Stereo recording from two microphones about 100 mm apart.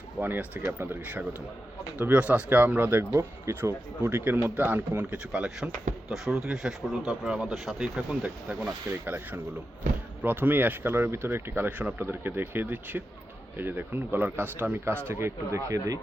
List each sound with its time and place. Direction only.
0.2 s speech: 20° right (ahead or behind)